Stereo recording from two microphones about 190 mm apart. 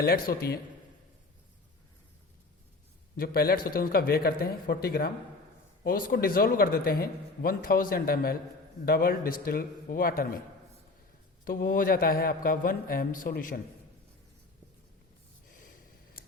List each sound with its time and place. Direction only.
0.0 s a man's voice: 55° left (ahead or behind)
3.2 s a man's voice: 55° left (ahead or behind)
11.4 s a man's voice: 50° left (ahead or behind)
15.4 s a sound: 45° left (ahead or behind)